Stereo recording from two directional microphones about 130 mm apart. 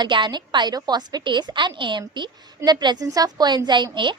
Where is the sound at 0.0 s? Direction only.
35° right (ahead or behind).